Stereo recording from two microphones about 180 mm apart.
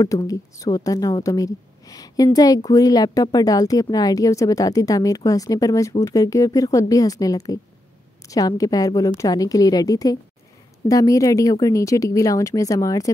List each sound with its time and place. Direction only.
0.0 s a woman's voice: 20° left (ahead or behind)